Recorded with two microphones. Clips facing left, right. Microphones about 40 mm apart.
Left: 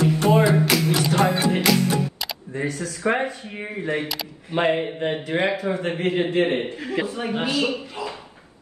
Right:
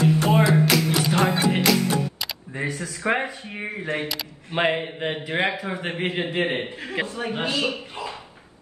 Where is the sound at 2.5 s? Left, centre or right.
Centre.